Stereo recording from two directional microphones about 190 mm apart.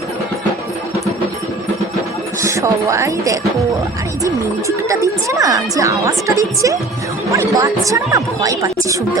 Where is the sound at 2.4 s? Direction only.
15° right (ahead or behind).